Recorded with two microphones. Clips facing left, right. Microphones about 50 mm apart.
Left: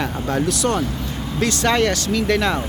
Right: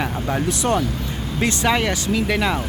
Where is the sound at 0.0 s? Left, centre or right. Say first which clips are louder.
Left 1 dB; centre.